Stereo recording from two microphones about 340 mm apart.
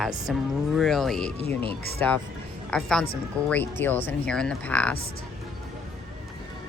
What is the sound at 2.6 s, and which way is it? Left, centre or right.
A woman's voice, centre.